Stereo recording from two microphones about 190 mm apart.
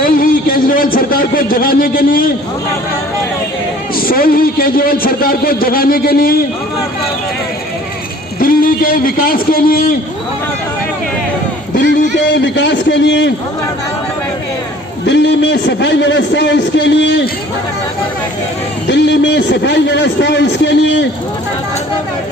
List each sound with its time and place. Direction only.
0.0 s a man's voice: 50° left (ahead or behind)
3.9 s a man's voice: 50° left (ahead or behind)
8.4 s a man's voice: 50° left (ahead or behind)
12.1 s a man's voice: 70° left (ahead or behind)
15.0 s a man's voice: 70° left (ahead or behind)
18.9 s a man's voice: 65° left (ahead or behind)